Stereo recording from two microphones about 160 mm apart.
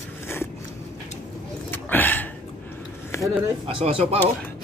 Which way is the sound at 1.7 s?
10° left (ahead or behind).